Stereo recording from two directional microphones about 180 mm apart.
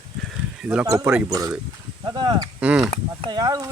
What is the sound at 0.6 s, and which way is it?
Speech, 5° right (ahead or behind).